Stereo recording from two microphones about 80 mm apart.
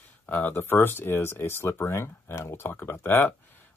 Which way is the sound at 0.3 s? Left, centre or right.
Left.